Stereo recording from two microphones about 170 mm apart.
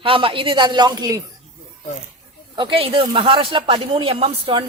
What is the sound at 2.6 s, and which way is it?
Speech, 30° right (ahead or behind).